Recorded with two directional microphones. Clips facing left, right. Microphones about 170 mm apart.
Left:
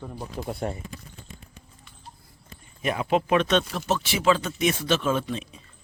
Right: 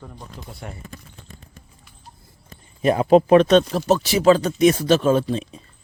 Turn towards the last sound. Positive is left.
turn(degrees=-35)  # may be behind; listen again after turning